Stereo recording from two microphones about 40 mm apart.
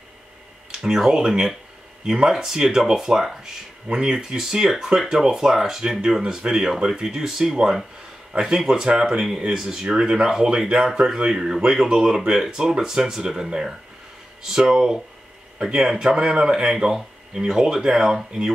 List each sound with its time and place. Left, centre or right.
0.7 s speech: centre
2.3 s speech: centre
11.1 s speech: centre
11.5 s speech: centre
14.5 s speech: centre